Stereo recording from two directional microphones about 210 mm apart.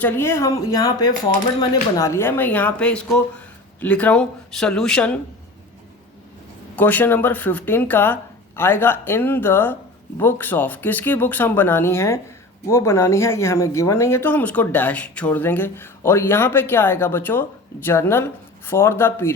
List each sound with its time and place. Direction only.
0.0 s speech: 10° left (ahead or behind)
6.7 s speech: 10° left (ahead or behind)